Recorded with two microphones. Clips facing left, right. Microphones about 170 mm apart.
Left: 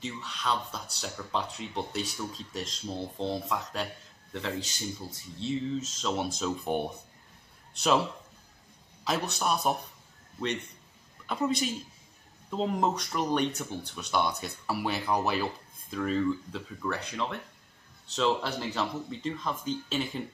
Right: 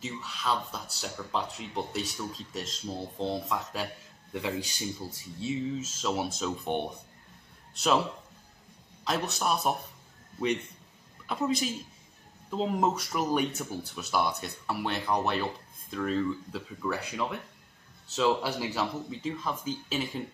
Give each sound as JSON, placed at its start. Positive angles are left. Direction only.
{"t": 0.0, "sound": "a man's voice", "side_deg": -5}
{"t": 9.0, "sound": "speech", "side_deg": 0}
{"t": 11.2, "sound": "speech", "side_deg": 0}